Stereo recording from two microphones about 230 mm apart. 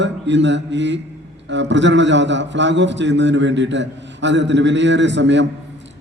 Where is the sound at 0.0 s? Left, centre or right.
Right.